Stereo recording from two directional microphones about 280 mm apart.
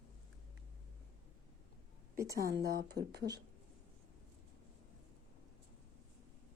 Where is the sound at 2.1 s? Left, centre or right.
Centre.